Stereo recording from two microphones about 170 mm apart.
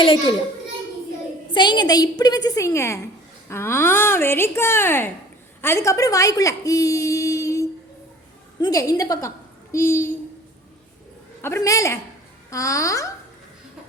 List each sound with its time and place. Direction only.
0.0 s a child's voice: 30° left (ahead or behind)
1.5 s a woman's voice: 25° left (ahead or behind)
8.6 s a woman's voice: 20° left (ahead or behind)
11.4 s a woman's voice: 20° left (ahead or behind)